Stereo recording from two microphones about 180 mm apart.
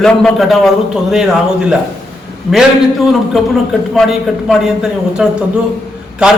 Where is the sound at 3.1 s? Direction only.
Centre (ahead or behind).